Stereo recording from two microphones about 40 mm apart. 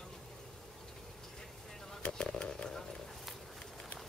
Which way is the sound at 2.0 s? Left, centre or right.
Left.